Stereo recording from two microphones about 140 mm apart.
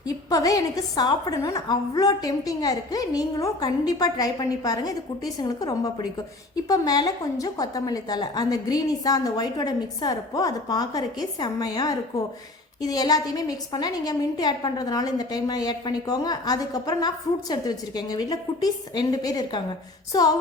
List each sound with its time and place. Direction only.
0.0 s a woman's voice: 25° left (ahead or behind)